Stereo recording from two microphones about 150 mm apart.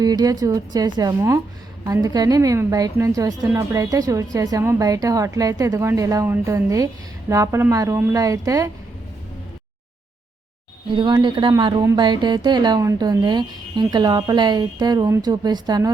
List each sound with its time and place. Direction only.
0.0 s speech: 25° right (ahead or behind)
10.9 s speech: 30° right (ahead or behind)